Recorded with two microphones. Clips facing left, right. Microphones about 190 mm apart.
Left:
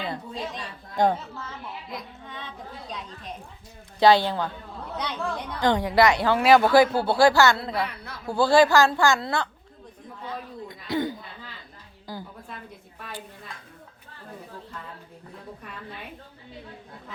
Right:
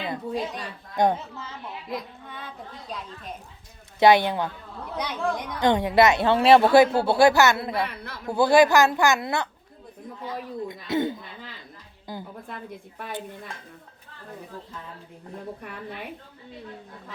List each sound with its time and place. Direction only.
0.1 s speech: 20° right (ahead or behind)
4.0 s a woman's voice: 20° right (ahead or behind)
10.7 s a woman's voice: 25° right (ahead or behind)